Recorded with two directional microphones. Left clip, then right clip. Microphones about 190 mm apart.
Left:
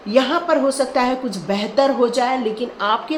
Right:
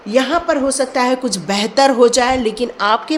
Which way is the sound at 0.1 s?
20° right (ahead or behind).